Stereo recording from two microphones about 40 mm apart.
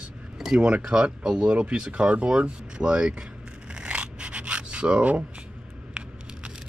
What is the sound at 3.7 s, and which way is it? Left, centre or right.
Rub, right.